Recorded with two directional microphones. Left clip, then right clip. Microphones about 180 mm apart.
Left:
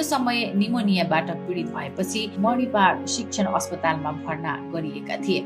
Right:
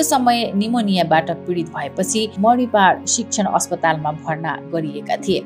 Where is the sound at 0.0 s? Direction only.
40° right (ahead or behind).